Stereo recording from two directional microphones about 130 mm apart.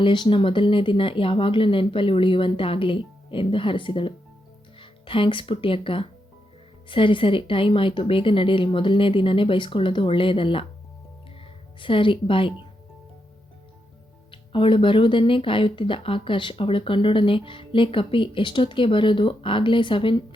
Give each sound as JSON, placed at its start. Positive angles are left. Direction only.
{"t": 0.0, "sound": "speech", "side_deg": 40}
{"t": 11.8, "sound": "speech", "side_deg": 40}
{"t": 14.3, "sound": "speech", "side_deg": 40}